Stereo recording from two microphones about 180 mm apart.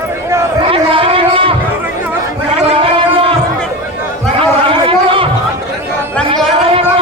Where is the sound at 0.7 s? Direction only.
30° right (ahead or behind).